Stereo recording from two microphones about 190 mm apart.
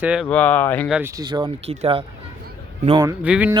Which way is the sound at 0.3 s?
5° left (ahead or behind).